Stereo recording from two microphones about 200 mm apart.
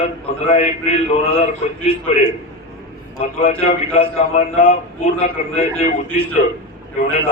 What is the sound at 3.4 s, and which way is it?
A man's voice, 30° left (ahead or behind).